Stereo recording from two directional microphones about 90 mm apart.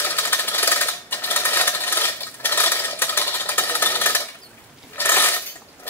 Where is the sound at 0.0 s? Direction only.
25° left (ahead or behind).